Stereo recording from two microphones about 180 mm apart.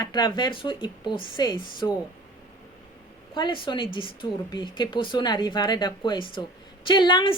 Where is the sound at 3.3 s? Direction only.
25° left (ahead or behind).